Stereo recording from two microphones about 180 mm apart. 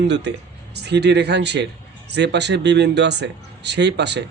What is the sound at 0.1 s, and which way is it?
Speech, 75° right (ahead or behind).